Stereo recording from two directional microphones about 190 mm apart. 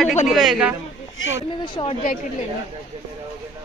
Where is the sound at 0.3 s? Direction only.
Centre (ahead or behind).